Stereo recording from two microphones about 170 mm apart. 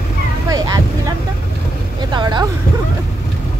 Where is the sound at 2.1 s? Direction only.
25° right (ahead or behind).